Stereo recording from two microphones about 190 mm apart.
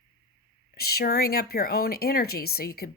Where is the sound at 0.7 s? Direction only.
55° left (ahead or behind).